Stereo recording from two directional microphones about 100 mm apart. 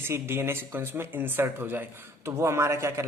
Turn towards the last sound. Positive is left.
turn(degrees=-30)  # may be behind; listen again after turning